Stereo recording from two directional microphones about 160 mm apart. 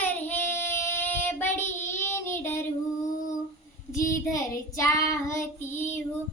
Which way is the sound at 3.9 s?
55° left (ahead or behind).